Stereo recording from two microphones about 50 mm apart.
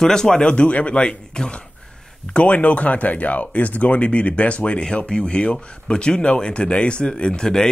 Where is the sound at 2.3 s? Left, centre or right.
Left.